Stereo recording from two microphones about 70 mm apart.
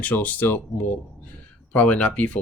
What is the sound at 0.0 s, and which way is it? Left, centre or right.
Speech, left.